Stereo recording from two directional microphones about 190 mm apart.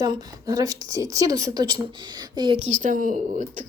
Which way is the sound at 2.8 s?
45° right (ahead or behind).